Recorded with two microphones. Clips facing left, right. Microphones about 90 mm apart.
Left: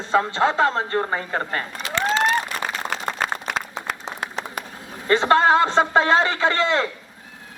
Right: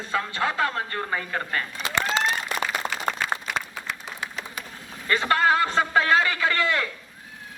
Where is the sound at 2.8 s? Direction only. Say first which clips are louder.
Left 2 dB; 10° right (ahead or behind).